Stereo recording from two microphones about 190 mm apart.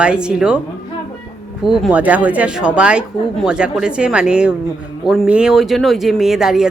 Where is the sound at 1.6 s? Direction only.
Centre (ahead or behind).